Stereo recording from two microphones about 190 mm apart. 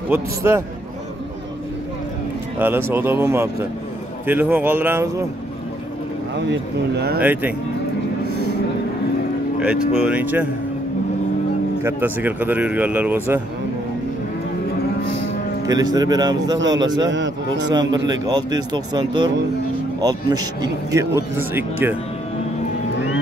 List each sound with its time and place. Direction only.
0.1 s speech: 10° right (ahead or behind)
2.6 s speech: 10° right (ahead or behind)
6.5 s speech: 60° right (ahead or behind)
7.2 s speech: 10° right (ahead or behind)
9.6 s speech: 5° right (ahead or behind)
11.8 s speech: 10° right (ahead or behind)
15.6 s speech: 20° right (ahead or behind)